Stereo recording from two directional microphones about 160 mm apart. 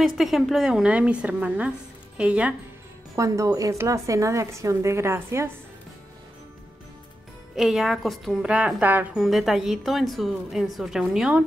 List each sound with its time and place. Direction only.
0.0 s a woman's voice: centre (ahead or behind)
3.2 s a woman's voice: 20° right (ahead or behind)
7.5 s a woman's voice: centre (ahead or behind)